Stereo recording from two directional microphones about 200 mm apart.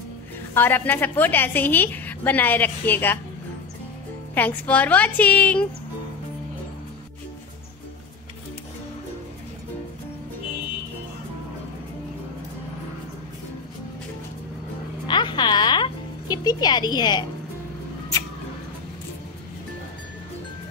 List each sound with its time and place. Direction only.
0.6 s a woman's voice: 10° left (ahead or behind)
4.4 s a woman's voice: 5° left (ahead or behind)
15.0 s music: 20° left (ahead or behind)